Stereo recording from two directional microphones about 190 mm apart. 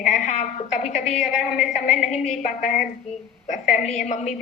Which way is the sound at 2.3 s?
40° left (ahead or behind).